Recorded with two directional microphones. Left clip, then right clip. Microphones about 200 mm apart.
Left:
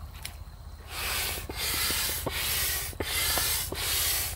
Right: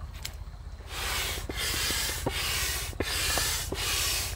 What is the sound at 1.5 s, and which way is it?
Rub, 20° right (ahead or behind).